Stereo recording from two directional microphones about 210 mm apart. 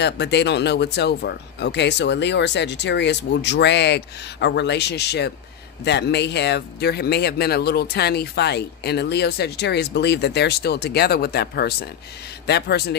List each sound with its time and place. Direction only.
0.0 s speech: 55° left (ahead or behind)